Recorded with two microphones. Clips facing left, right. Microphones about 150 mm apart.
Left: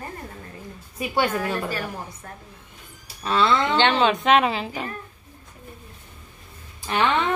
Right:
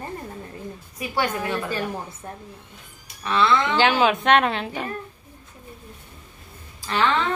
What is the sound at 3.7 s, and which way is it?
A woman's voice, 5° right (ahead or behind).